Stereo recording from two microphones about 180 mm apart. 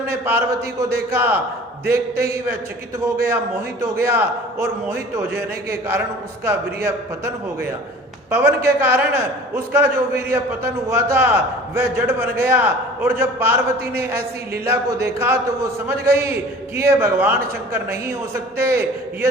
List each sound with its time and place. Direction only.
0.1 s a man's voice: 15° right (ahead or behind)
1.8 s speech: 55° right (ahead or behind)
3.2 s a man's voice: 15° right (ahead or behind)